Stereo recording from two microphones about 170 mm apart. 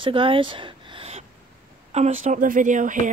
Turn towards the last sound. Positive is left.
turn(degrees=-50)  # may be behind; listen again after turning